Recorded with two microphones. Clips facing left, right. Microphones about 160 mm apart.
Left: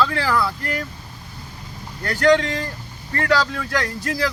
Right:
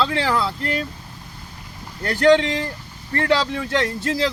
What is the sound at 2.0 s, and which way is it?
Speech, 25° right (ahead or behind).